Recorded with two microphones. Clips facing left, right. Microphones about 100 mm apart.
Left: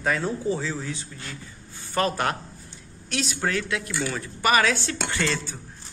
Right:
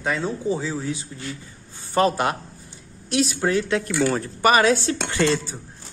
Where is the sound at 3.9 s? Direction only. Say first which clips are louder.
Right 7 dB; 45° right (ahead or behind).